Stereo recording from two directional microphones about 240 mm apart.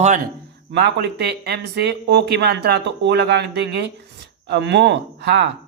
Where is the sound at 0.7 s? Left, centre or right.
Right.